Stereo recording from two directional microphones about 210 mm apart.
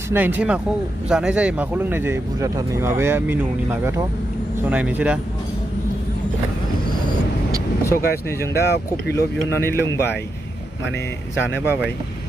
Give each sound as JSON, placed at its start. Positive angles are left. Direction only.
{"t": 0.1, "sound": "speech", "side_deg": -10}
{"t": 4.6, "sound": "speech", "side_deg": -5}
{"t": 7.9, "sound": "speech", "side_deg": 45}
{"t": 9.6, "sound": "a man's voice", "side_deg": 10}